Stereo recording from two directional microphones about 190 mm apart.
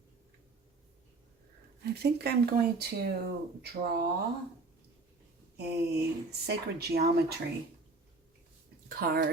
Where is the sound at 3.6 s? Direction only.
50° right (ahead or behind).